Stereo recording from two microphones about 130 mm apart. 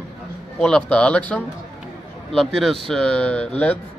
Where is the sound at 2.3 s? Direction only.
Centre (ahead or behind).